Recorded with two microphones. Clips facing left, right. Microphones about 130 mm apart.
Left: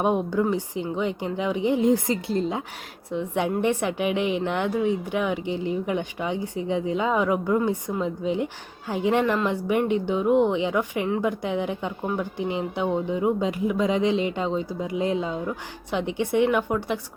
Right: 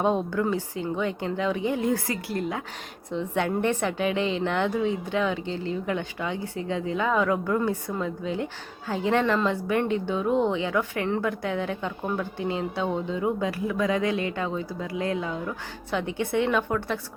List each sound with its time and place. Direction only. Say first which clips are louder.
0.0 s a woman's voice: left 2 dB; 15° left (ahead or behind)